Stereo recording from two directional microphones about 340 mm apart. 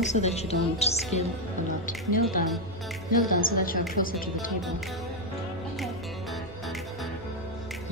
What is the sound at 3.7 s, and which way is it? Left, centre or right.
Music, left.